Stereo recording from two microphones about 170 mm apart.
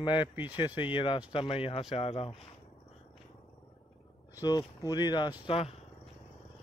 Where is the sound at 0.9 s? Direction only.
30° left (ahead or behind).